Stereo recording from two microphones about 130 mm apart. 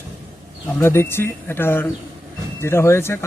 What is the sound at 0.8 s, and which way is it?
Speech, 20° left (ahead or behind).